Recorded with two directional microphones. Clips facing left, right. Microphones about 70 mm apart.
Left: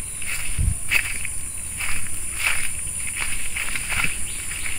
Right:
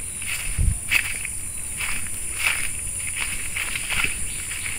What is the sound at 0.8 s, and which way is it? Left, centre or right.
Walk, centre.